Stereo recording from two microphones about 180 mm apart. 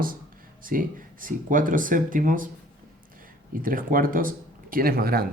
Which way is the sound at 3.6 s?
50° right (ahead or behind).